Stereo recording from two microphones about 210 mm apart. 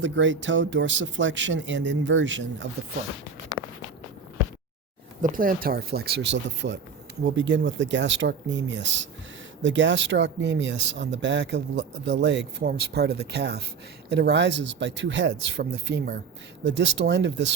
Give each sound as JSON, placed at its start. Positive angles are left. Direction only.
{"t": 0.0, "sound": "speech", "side_deg": -60}
{"t": 3.5, "sound": "walk", "side_deg": -15}
{"t": 5.2, "sound": "speech", "side_deg": -40}